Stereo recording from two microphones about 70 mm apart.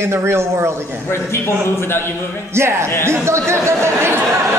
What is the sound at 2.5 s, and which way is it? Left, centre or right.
A woman's voice, right.